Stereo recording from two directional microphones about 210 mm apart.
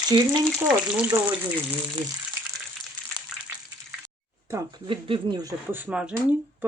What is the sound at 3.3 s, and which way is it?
Frying, centre (ahead or behind).